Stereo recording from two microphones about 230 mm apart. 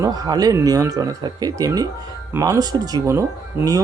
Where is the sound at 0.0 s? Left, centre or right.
Centre.